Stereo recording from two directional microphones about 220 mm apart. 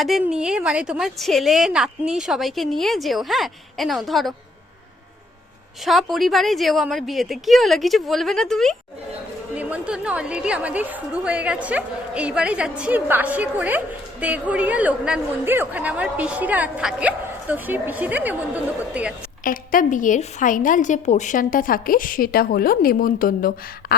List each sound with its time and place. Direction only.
0.0 s a woman's voice: centre (ahead or behind)
5.8 s a woman's voice: centre (ahead or behind)
19.5 s a woman's voice: 40° left (ahead or behind)